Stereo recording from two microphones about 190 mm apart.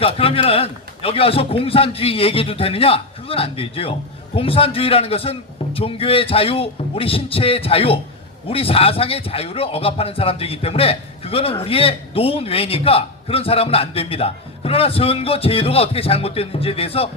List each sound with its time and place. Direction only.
0.0 s a man's voice: 30° left (ahead or behind)